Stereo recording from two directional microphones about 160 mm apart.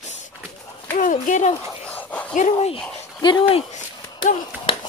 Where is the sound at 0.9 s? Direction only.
55° left (ahead or behind).